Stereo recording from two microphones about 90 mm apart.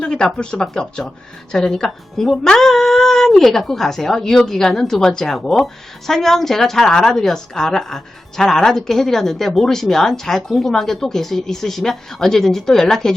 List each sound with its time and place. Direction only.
0.0 s speech: 10° left (ahead or behind)